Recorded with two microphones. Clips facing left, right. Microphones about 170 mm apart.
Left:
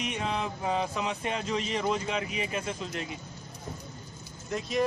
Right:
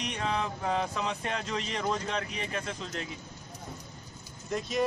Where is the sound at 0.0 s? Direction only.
5° left (ahead or behind).